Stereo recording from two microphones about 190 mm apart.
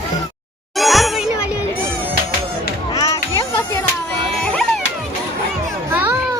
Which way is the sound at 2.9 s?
15° left (ahead or behind).